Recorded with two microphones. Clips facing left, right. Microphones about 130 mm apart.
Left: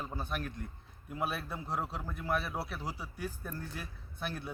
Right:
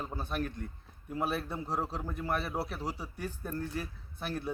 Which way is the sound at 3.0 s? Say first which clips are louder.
Right 2 dB; 35° right (ahead or behind).